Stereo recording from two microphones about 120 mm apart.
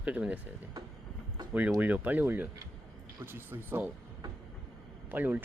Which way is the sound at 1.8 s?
15° right (ahead or behind).